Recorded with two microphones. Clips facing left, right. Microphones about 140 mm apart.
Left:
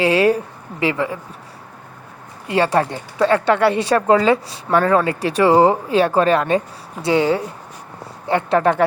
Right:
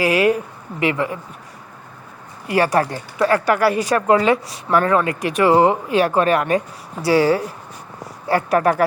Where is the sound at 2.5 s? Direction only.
25° left (ahead or behind).